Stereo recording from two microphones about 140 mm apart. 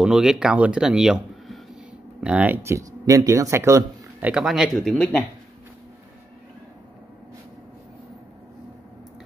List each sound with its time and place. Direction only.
0.0 s speech: 5° right (ahead or behind); by 4.3 s 20° right (ahead or behind)
4.3 s speech: 5° right (ahead or behind)